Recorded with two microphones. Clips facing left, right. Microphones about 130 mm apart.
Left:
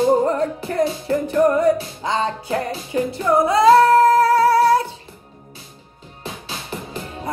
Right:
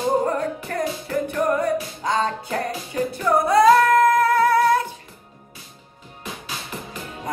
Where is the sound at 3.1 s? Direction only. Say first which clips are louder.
Left 1 dB; 25° left (ahead or behind).